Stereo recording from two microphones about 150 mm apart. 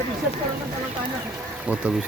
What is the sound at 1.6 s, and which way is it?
Speech, 10° right (ahead or behind).